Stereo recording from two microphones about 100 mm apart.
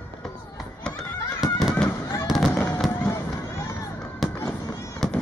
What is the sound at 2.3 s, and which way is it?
Fireworks, 5° right (ahead or behind).